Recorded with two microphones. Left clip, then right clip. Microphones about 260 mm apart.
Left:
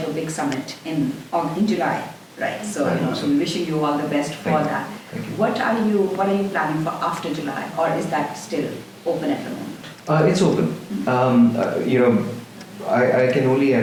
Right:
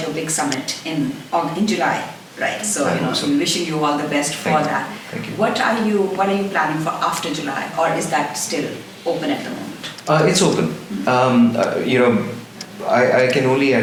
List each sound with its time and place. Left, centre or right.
0.0 s speech: centre
10.1 s speech: centre